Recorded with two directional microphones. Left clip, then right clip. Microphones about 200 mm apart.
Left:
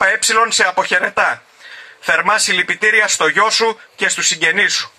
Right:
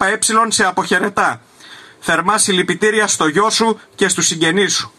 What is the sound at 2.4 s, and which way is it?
Speech, 35° left (ahead or behind).